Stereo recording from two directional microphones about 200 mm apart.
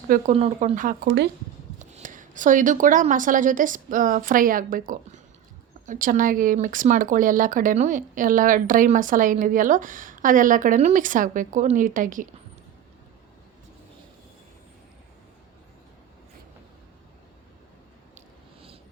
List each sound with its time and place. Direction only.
0.1 s speech: 35° right (ahead or behind)
1.0 s speech: 55° right (ahead or behind)
1.8 s speech: 40° right (ahead or behind)
5.8 s speech: 40° right (ahead or behind)